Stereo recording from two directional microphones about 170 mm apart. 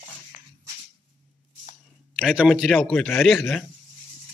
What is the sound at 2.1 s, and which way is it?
A man's voice, 5° right (ahead or behind).